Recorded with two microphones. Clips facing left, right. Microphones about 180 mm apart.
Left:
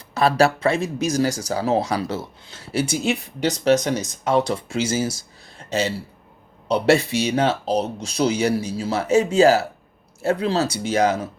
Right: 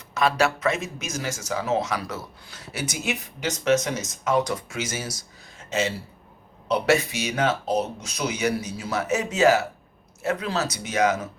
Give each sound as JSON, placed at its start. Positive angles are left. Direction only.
{"t": 0.1, "sound": "speech", "side_deg": 35}